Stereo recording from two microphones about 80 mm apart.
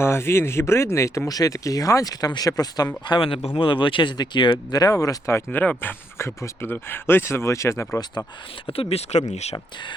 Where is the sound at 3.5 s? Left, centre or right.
Left.